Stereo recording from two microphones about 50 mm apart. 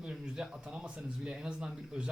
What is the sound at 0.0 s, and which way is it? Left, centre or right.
A man's voice, centre.